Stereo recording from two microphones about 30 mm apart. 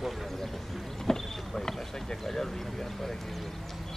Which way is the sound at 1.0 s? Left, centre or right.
Centre.